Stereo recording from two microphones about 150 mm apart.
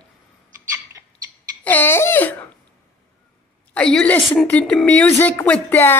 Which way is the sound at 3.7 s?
5° left (ahead or behind).